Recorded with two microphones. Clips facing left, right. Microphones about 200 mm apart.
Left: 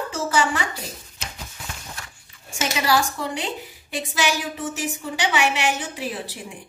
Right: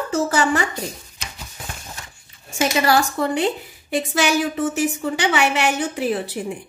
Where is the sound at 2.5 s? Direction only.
50° right (ahead or behind).